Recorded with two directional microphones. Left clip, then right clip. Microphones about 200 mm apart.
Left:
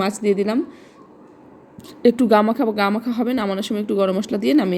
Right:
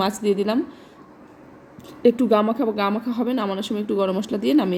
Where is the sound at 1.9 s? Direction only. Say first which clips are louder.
Left 2 dB; 25° left (ahead or behind).